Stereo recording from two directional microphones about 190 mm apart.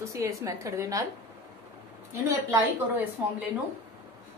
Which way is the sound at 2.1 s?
15° right (ahead or behind).